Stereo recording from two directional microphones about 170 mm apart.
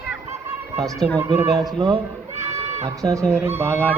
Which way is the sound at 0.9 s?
10° left (ahead or behind).